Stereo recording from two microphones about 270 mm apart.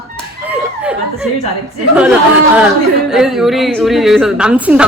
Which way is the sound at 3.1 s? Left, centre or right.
Centre.